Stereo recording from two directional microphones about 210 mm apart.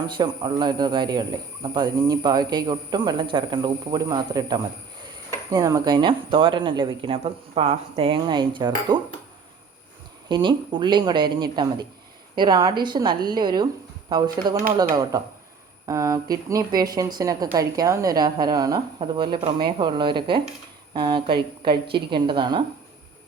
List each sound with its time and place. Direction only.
0.1 s a man's voice: 20° right (ahead or behind)
10.2 s a man's voice: 20° right (ahead or behind)